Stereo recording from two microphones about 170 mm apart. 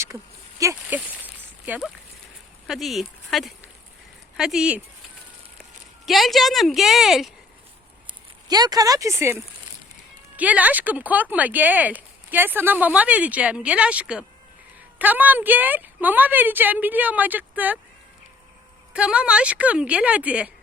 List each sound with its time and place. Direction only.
0.6 s a sound: 15° right (ahead or behind)
2.6 s a woman's voice: centre (ahead or behind)
6.1 s a woman's voice: centre (ahead or behind)
8.0 s speech: 25° right (ahead or behind)
18.9 s speech: 5° right (ahead or behind)